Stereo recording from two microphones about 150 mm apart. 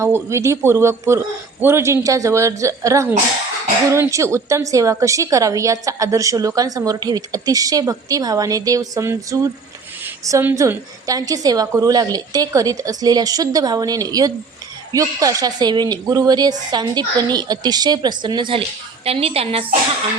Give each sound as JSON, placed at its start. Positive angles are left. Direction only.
{"t": 0.0, "sound": "a woman's voice", "side_deg": -20}